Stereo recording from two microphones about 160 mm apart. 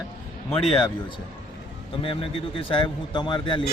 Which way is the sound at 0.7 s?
30° left (ahead or behind).